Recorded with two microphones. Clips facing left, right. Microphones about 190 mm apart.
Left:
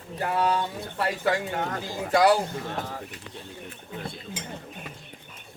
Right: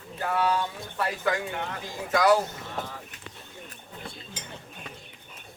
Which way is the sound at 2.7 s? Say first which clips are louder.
Left 3 dB; 45° left (ahead or behind).